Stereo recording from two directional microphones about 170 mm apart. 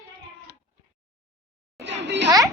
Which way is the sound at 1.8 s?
90° right.